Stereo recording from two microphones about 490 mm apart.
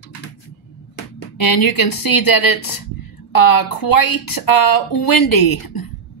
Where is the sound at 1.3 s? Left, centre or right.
Left.